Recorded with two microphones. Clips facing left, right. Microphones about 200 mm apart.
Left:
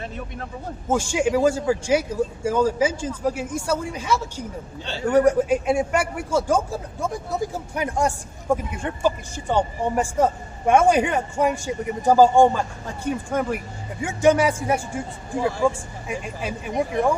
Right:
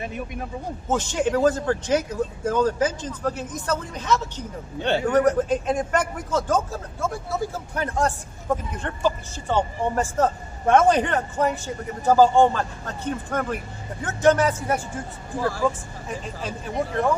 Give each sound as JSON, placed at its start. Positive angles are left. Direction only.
{"t": 0.9, "sound": "a man's voice", "side_deg": 10}
{"t": 4.8, "sound": "a man's voice", "side_deg": -60}
{"t": 5.0, "sound": "a man's voice", "side_deg": 10}